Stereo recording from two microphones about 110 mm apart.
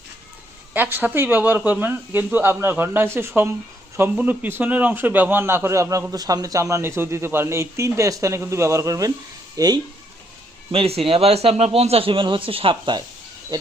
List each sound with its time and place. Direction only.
0.7 s a man's voice: 15° right (ahead or behind); by 9.8 s 40° right (ahead or behind)
10.7 s speech: 60° right (ahead or behind); by 13.1 s 45° right (ahead or behind)